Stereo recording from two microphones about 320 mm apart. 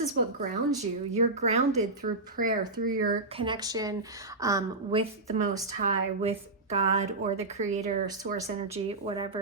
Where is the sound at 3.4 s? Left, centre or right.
Centre.